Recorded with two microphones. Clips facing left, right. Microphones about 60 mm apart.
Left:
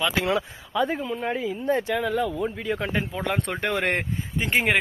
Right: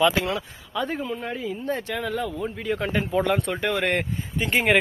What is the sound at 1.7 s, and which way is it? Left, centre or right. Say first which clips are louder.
Speech: left 6 dB; centre.